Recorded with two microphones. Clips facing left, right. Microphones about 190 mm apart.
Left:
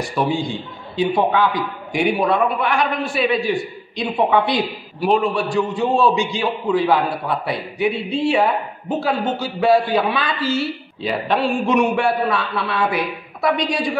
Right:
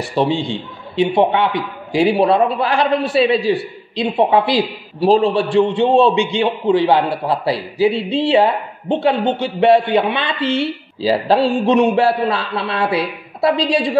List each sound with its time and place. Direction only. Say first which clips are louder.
0.1 s a man's voice: right 5 dB; 30° right (ahead or behind)